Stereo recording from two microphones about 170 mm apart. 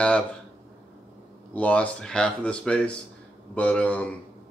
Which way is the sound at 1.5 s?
10° left (ahead or behind).